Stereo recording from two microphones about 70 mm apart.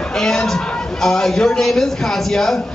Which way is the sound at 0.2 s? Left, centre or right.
Centre.